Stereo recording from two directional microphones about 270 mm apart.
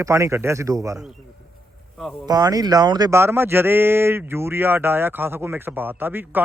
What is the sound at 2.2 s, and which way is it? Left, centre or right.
A man's voice, centre.